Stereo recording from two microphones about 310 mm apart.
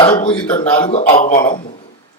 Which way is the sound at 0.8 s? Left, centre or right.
Left.